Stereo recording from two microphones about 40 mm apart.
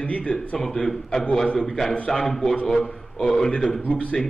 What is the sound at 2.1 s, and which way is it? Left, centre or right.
Speech, centre.